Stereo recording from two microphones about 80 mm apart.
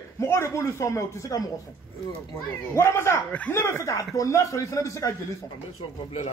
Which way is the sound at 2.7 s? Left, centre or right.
Left.